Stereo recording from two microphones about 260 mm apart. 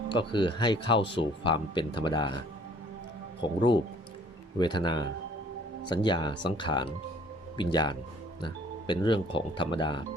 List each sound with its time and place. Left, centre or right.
0.1 s speech: centre
3.4 s speech: centre